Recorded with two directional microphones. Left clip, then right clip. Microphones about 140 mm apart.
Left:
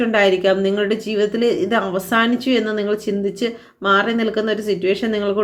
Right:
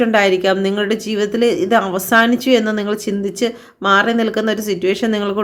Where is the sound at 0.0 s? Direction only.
25° right (ahead or behind).